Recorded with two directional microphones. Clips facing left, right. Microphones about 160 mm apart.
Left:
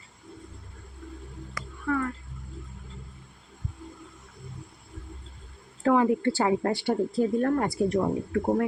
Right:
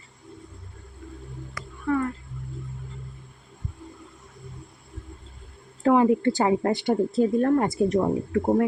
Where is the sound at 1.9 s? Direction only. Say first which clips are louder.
Right 3 dB; 25° right (ahead or behind).